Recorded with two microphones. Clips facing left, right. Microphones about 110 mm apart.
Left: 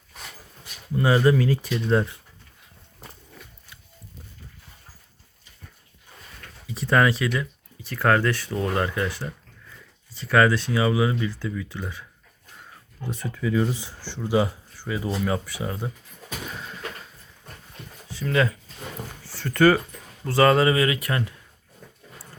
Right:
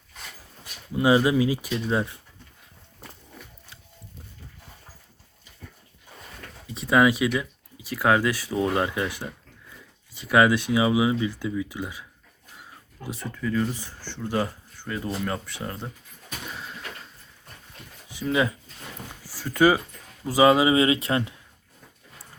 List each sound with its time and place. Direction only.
0.9 s speech: 15° right (ahead or behind)
6.7 s a sound: centre (ahead or behind)
7.0 s speech: 15° right (ahead or behind)
13.1 s speech: 5° left (ahead or behind)
18.1 s speech: 15° right (ahead or behind)
19.2 s a sound: 10° right (ahead or behind)
20.2 s speech: 10° right (ahead or behind)
20.7 s speech: 25° right (ahead or behind)